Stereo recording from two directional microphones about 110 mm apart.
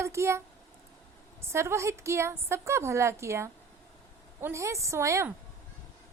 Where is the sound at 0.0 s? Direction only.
25° right (ahead or behind).